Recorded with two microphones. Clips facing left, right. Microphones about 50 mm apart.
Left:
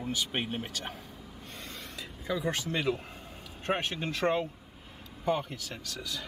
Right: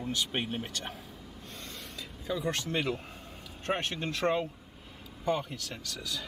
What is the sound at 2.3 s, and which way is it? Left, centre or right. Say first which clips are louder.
Speech: even; centre.